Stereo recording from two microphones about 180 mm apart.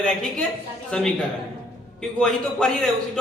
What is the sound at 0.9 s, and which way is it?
A man's voice, 5° left (ahead or behind).